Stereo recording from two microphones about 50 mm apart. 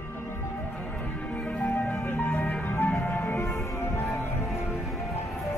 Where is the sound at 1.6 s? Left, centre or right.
Left.